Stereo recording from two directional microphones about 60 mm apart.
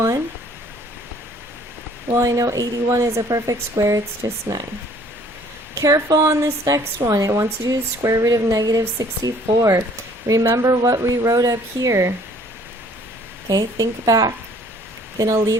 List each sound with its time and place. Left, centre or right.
2.1 s speech: right
5.7 s speech: right
7.1 s speech: right
10.5 s speech: right
13.5 s speech: right
15.2 s speech: right